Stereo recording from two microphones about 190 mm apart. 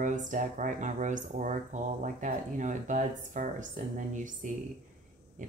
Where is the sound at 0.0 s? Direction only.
40° right (ahead or behind).